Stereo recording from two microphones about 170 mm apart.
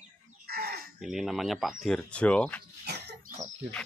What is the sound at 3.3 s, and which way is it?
Chicken, 45° right (ahead or behind).